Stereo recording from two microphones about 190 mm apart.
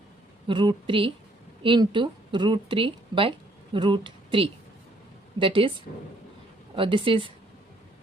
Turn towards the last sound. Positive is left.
turn(degrees=-25)  # may be behind; listen again after turning